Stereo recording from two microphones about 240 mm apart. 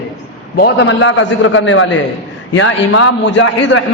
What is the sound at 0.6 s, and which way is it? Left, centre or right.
A man's voice, left.